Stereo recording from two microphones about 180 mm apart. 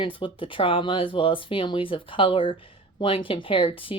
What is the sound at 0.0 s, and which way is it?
Speech, 30° left (ahead or behind).